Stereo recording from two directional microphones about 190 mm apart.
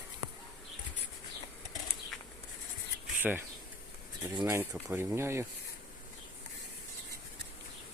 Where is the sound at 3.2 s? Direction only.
10° right (ahead or behind).